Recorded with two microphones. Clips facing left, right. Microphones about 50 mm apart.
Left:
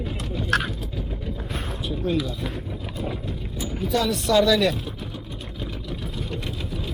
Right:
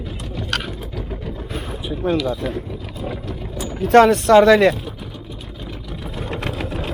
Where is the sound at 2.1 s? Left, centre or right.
Right.